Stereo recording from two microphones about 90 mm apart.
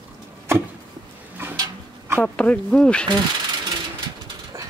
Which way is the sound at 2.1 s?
15° left (ahead or behind).